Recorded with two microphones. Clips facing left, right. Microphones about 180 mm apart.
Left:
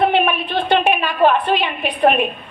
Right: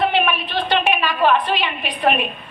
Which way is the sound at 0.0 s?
50° left (ahead or behind).